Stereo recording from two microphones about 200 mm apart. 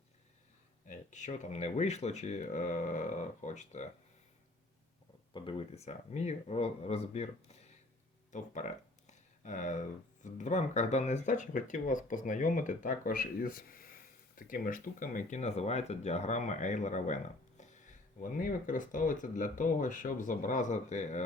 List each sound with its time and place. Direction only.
0.9 s speech: 35° left (ahead or behind)
5.3 s speech: 25° left (ahead or behind)